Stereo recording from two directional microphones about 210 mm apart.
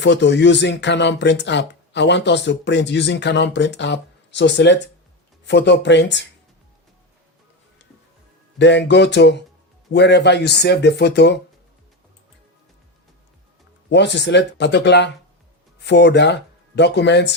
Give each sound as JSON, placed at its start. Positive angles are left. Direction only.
{"t": 0.0, "sound": "speech", "side_deg": 55}
{"t": 8.5, "sound": "speech", "side_deg": 55}
{"t": 13.9, "sound": "speech", "side_deg": 55}